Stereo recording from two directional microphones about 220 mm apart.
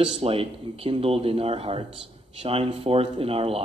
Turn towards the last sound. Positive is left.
turn(degrees=-25)  # may be behind; listen again after turning